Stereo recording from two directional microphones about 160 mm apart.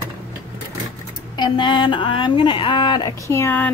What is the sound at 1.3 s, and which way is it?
Speech, 30° left (ahead or behind).